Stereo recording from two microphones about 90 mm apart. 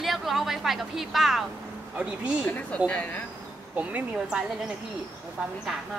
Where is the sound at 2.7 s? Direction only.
15° left (ahead or behind).